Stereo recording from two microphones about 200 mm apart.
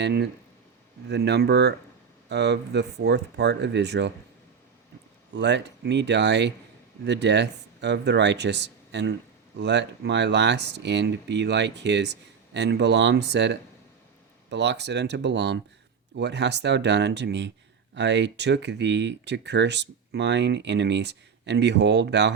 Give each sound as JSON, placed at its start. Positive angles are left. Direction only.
{"t": 0.0, "sound": "speech", "side_deg": -55}
{"t": 5.3, "sound": "speech", "side_deg": -60}